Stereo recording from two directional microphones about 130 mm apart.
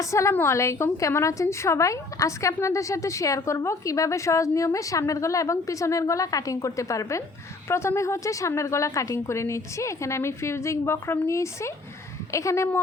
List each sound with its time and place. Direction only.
0.0 s a woman's voice: 25° left (ahead or behind)